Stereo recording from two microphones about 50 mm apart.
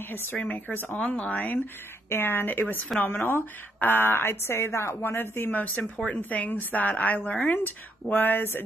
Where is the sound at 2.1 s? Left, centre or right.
Left.